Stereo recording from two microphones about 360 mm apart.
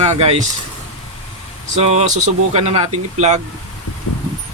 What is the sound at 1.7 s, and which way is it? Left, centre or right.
Speech, centre.